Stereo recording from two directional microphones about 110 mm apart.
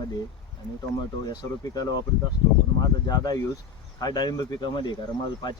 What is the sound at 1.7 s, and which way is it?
Speech, 40° left (ahead or behind).